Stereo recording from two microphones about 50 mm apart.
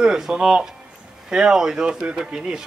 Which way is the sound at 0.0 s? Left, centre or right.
Centre.